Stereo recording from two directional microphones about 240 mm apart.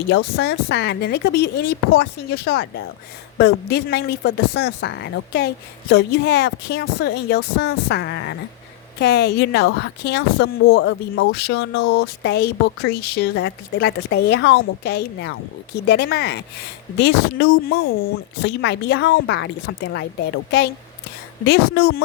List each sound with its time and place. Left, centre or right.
0.1 s a woman's voice: left